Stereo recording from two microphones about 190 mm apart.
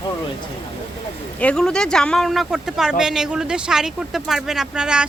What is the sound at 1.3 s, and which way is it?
Speech, 5° left (ahead or behind).